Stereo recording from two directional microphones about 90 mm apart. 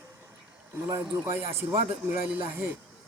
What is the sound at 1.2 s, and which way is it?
Speech, 25° right (ahead or behind).